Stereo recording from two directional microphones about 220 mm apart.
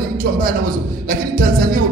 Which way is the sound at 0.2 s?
40° right (ahead or behind).